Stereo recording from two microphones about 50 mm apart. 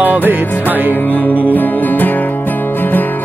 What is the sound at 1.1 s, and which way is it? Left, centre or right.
Music, left.